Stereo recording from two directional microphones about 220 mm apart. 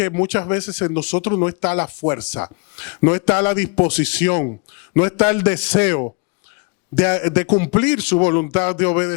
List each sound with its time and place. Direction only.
0.0 s a man's voice: 25° left (ahead or behind)
4.3 s a man's voice: 30° left (ahead or behind)
4.9 s a man's voice: 20° left (ahead or behind)
7.4 s a man's voice: 35° left (ahead or behind)
7.7 s a man's voice: 15° left (ahead or behind)
8.2 s a man's voice: 30° left (ahead or behind)